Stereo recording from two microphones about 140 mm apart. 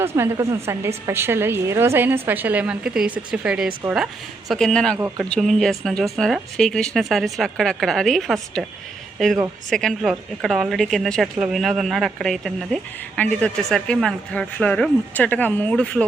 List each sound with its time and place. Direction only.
0.0 s a woman's voice: 20° right (ahead or behind); by 16.0 s 5° left (ahead or behind)